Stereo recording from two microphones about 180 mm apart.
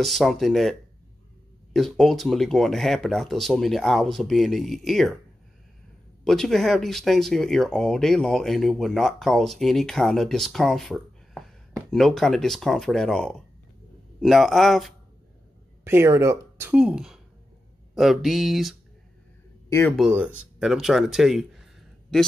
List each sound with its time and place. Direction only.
0.0 s speech: centre (ahead or behind)
6.2 s speech: centre (ahead or behind)
15.8 s speech: 15° right (ahead or behind)
20.0 s speech: 5° right (ahead or behind)